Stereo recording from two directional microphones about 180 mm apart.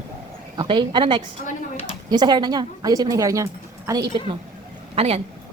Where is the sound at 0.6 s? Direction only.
25° right (ahead or behind).